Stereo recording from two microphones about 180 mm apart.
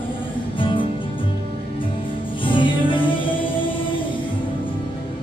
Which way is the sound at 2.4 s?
25° left (ahead or behind).